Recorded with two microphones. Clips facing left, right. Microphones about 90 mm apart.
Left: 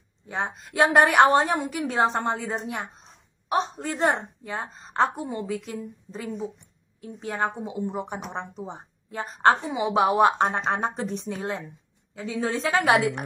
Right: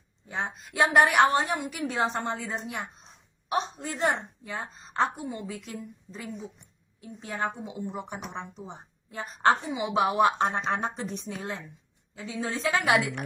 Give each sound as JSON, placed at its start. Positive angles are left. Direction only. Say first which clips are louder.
{"t": 0.3, "sound": "a woman's voice", "louder": "left 3 dB", "side_deg": 30}
{"t": 7.2, "sound": "a woman's voice", "louder": "left 4 dB", "side_deg": 40}
{"t": 7.6, "sound": "speech", "louder": "left 5 dB", "side_deg": 30}
{"t": 8.3, "sound": "a woman's voice", "louder": "left 5 dB", "side_deg": 40}